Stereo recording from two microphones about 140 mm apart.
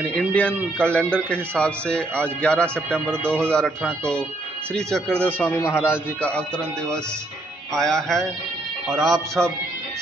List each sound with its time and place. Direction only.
0.0 s speech: 10° left (ahead or behind)
4.7 s music: 5° left (ahead or behind)
5.6 s speech: 20° left (ahead or behind)
7.7 s music: 5° left (ahead or behind)